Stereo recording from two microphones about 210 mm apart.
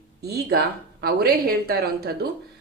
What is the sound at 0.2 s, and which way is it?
Speech, 50° right (ahead or behind).